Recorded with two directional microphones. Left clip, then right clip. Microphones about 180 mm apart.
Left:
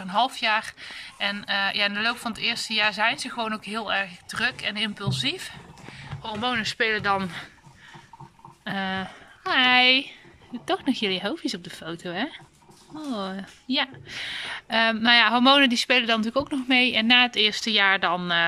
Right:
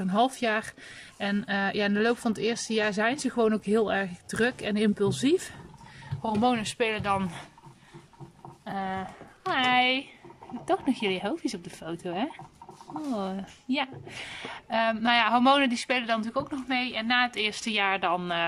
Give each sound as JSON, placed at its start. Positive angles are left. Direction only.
{"t": 0.0, "sound": "speech", "side_deg": -40}
{"t": 6.4, "sound": "speech", "side_deg": -20}
{"t": 8.6, "sound": "a woman's voice", "side_deg": -5}
{"t": 17.3, "sound": "speech", "side_deg": -10}